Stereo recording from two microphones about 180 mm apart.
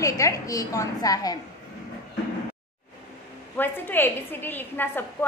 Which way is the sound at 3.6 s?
10° left (ahead or behind).